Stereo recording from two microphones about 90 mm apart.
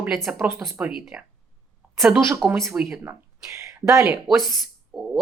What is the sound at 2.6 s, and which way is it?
Speech, 5° right (ahead or behind).